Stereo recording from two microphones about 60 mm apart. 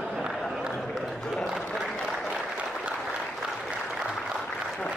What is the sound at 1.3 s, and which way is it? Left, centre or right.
Applause, centre.